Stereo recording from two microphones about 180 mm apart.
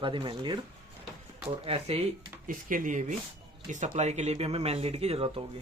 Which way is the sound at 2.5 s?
50° right (ahead or behind).